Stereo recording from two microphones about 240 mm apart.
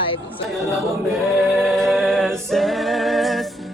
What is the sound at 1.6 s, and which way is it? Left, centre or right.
Music, centre.